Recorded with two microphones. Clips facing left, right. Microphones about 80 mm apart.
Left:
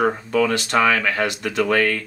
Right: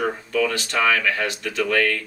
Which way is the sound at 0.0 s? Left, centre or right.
Left.